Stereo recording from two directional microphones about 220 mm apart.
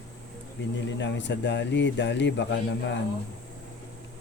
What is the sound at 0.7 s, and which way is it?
Speech, 55° left (ahead or behind).